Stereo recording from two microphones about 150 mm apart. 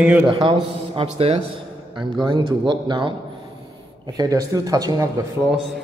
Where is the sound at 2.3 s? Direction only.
30° right (ahead or behind).